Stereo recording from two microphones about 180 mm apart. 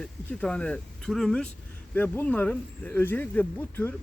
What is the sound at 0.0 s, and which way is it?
Speech, 5° left (ahead or behind).